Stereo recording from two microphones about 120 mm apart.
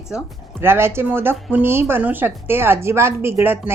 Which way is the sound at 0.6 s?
20° right (ahead or behind).